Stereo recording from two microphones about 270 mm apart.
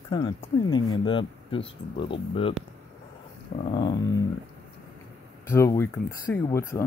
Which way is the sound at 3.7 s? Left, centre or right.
Centre.